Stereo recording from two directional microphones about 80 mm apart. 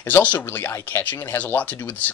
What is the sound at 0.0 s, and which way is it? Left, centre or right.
Speech, left.